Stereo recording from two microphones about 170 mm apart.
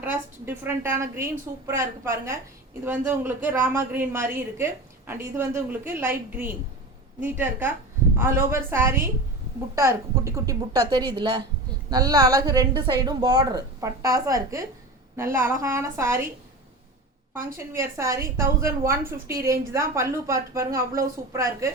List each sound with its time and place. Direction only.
0.0 s a woman's voice: 10° right (ahead or behind)
17.7 s a woman's voice: 15° right (ahead or behind)